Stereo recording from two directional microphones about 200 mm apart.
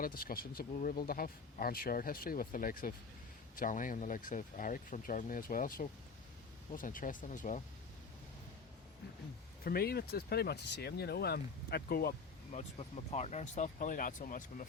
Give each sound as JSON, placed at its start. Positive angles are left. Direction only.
{"t": 0.0, "sound": "speech", "side_deg": 45}
{"t": 9.6, "sound": "speech", "side_deg": 50}
{"t": 12.5, "sound": "speech", "side_deg": 30}